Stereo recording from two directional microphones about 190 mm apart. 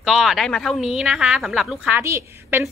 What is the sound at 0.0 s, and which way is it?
A woman's voice, centre (ahead or behind).